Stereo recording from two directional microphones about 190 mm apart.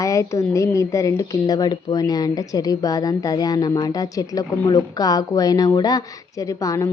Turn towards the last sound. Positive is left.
turn(degrees=15)  # may be behind; listen again after turning